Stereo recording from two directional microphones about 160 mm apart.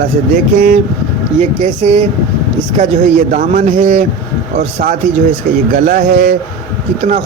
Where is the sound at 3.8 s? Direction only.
40° right (ahead or behind).